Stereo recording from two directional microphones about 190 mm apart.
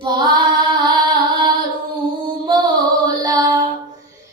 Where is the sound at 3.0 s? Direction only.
20° right (ahead or behind).